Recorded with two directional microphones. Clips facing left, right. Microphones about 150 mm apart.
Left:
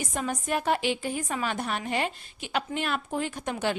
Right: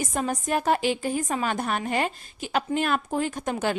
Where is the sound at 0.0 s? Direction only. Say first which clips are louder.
Right 3 dB; 40° right (ahead or behind).